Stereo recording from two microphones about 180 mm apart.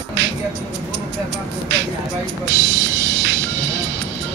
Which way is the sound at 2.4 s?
90° right.